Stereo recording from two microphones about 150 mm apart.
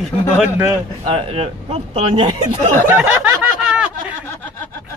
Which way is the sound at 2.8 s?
10° right (ahead or behind).